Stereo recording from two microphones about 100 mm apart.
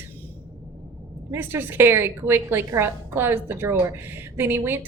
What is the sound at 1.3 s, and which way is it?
A woman's voice, 20° right (ahead or behind).